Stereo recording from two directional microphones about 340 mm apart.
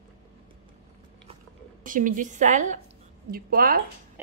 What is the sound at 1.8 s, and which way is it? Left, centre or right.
Speech, right.